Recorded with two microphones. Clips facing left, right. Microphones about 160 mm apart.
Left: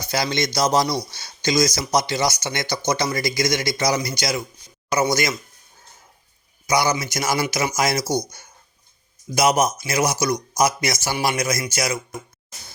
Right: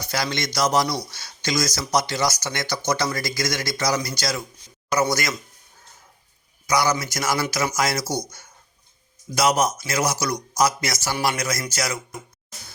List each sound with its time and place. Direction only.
0.0 s speech: 25° left (ahead or behind)
6.7 s speech: 20° left (ahead or behind)